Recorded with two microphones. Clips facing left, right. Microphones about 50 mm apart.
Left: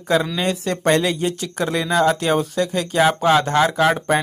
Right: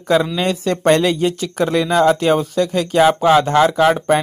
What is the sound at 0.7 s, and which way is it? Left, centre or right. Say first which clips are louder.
Speech: right 4 dB; right.